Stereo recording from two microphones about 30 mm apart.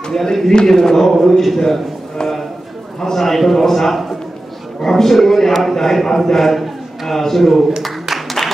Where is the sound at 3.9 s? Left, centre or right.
Centre.